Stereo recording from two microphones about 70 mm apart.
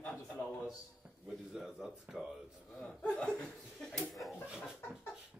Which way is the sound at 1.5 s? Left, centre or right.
Centre.